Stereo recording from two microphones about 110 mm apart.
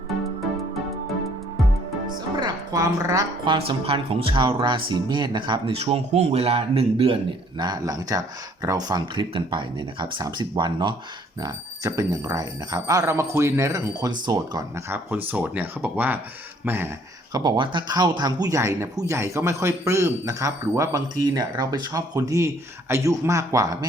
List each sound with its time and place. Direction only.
2.3 s speech: 45° right (ahead or behind)
2.8 s speech: 30° right (ahead or behind)
3.4 s speech: 50° right (ahead or behind)
5.7 s speech: 70° right (ahead or behind)
7.6 s speech: 40° right (ahead or behind)
11.3 s speech: 35° right (ahead or behind)
14.8 s speech: 20° right (ahead or behind)
17.3 s speech: 45° right (ahead or behind)